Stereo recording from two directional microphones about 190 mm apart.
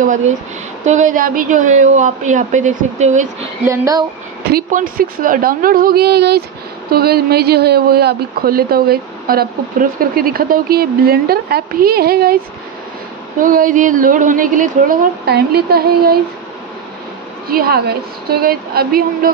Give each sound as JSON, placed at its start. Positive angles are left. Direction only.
{"t": 0.8, "sound": "a woman's voice", "side_deg": -40}
{"t": 3.6, "sound": "a woman's voice", "side_deg": -15}
{"t": 4.5, "sound": "speech", "side_deg": -50}
{"t": 13.4, "sound": "speech", "side_deg": -45}
{"t": 17.5, "sound": "speech", "side_deg": -55}